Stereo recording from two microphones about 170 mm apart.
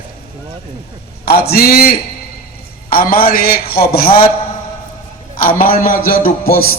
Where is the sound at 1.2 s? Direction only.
65° left (ahead or behind).